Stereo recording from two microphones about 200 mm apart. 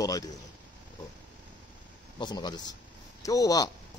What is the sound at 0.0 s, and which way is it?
Speech, 15° left (ahead or behind).